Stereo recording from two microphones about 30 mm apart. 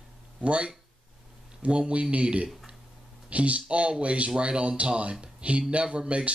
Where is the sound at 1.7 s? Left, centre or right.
Right.